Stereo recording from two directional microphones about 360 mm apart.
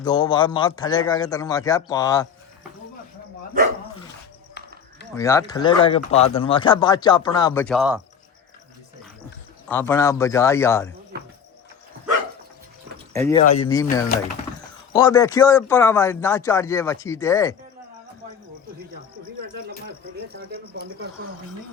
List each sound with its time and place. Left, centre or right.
0.0 s speech: centre
3.6 s dog: right
5.1 s speech: centre
9.6 s speech: centre
13.1 s speech: centre
14.9 s speech: centre
20.3 s a sound: right